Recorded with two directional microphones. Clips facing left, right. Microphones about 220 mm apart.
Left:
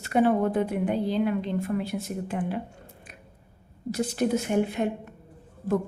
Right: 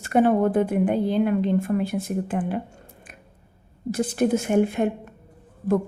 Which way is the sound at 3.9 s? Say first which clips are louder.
Right 4 dB; 50° right (ahead or behind).